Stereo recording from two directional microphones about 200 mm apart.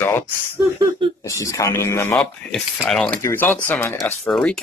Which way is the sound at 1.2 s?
15° left (ahead or behind).